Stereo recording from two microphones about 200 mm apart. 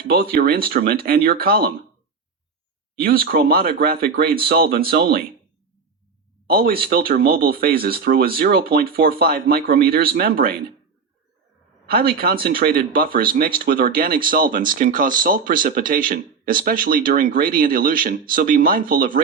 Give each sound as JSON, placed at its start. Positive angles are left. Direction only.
{"t": 0.0, "sound": "speech", "side_deg": -50}
{"t": 3.0, "sound": "speech", "side_deg": -50}
{"t": 6.5, "sound": "speech", "side_deg": -50}
{"t": 11.9, "sound": "speech", "side_deg": -50}